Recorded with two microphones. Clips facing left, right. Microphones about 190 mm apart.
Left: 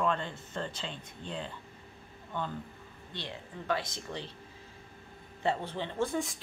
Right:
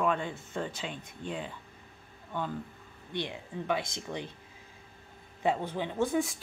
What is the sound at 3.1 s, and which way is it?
Speech, 15° right (ahead or behind).